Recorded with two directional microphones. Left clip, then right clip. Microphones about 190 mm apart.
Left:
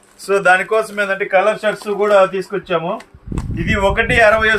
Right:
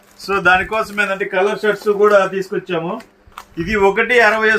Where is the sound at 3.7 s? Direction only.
40° left (ahead or behind).